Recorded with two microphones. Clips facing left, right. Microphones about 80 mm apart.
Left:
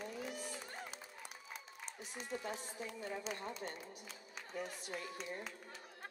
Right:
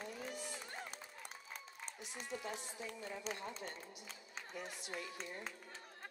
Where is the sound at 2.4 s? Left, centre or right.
Left.